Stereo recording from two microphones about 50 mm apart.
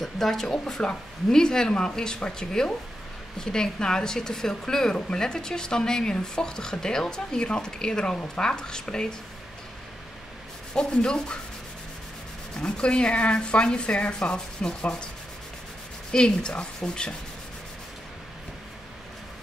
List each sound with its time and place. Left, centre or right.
0.0 s a woman's voice: centre
10.7 s a woman's voice: centre
12.5 s sanding: centre
16.1 s a woman's voice: centre